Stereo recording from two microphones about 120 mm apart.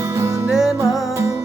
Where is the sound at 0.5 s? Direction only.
Centre (ahead or behind).